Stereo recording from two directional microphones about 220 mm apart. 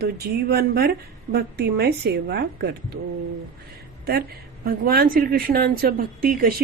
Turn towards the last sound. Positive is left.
turn(degrees=-40)  # may be behind; listen again after turning